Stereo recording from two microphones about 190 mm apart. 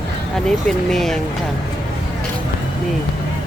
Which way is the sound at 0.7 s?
Centre (ahead or behind).